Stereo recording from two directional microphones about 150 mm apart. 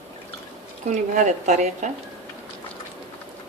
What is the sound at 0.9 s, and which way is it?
A woman's voice, 55° right (ahead or behind).